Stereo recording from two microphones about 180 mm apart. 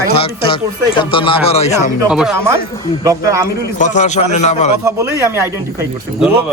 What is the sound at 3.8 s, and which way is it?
Speech, 45° left (ahead or behind).